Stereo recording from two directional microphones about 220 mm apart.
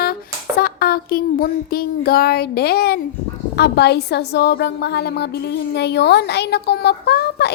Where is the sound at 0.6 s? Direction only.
45° left (ahead or behind).